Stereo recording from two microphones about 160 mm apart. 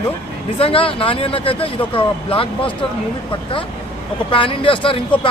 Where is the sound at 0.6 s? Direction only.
35° left (ahead or behind).